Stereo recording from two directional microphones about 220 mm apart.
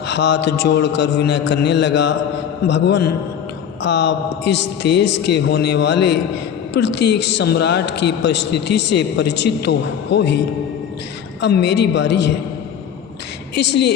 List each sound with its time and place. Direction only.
0.1 s a man's voice: 50° left (ahead or behind)
13.6 s a man's voice: 50° left (ahead or behind)